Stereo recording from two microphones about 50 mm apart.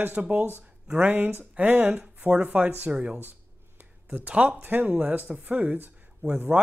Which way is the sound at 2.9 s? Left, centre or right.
Right.